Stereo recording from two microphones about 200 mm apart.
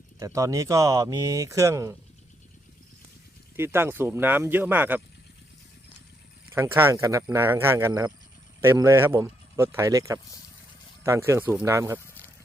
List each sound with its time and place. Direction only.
0.2 s speech: 15° right (ahead or behind)
3.6 s speech: 10° right (ahead or behind)
6.5 s speech: 15° right (ahead or behind)